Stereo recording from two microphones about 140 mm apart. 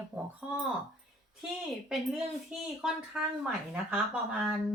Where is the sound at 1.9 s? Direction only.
5° right (ahead or behind).